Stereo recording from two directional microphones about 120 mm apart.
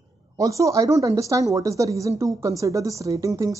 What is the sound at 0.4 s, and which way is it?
Speech, 25° right (ahead or behind).